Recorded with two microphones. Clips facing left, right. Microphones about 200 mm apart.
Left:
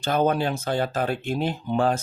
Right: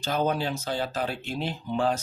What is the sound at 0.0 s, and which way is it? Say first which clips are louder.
Speech: left 4 dB; 55° left (ahead or behind).